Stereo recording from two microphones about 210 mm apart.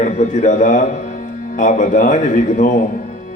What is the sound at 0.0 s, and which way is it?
A man's voice, 35° left (ahead or behind).